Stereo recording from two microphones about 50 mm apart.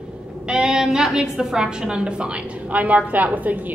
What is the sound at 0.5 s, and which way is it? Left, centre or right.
A woman's voice, centre.